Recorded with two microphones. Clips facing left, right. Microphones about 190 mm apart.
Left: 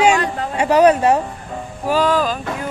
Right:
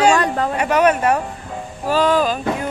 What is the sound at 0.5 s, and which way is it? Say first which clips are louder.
Speech: left 5 dB; 35° left (ahead or behind).